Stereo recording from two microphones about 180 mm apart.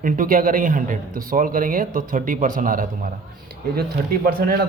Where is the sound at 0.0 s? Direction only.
50° right (ahead or behind).